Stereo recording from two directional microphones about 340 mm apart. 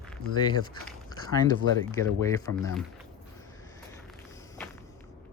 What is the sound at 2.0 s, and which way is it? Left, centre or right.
Speech, centre.